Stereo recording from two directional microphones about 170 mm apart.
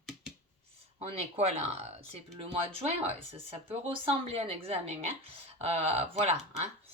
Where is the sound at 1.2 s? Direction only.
40° right (ahead or behind).